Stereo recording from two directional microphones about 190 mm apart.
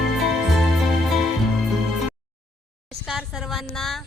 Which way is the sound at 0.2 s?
Centre (ahead or behind).